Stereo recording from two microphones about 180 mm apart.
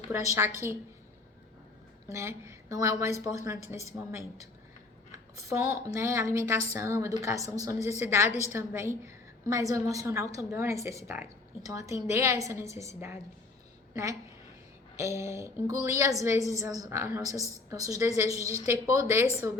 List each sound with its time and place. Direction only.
0.1 s a woman's voice: 15° right (ahead or behind)
2.0 s a woman's voice: 15° right (ahead or behind)